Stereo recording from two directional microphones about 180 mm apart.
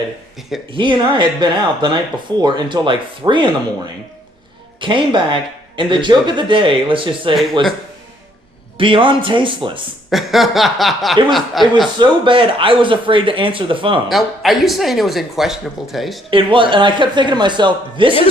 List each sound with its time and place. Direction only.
0.7 s speech: 25° right (ahead or behind)
4.8 s speech: 25° right (ahead or behind)
8.8 s speech: 30° right (ahead or behind)
10.1 s speech: centre (ahead or behind)
11.9 s speech: 25° right (ahead or behind)
14.1 s speech: centre (ahead or behind)
16.3 s speech: 30° right (ahead or behind)